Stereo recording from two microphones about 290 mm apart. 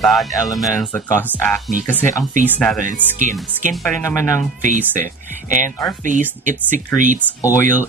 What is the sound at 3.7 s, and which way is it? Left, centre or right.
Speech, centre.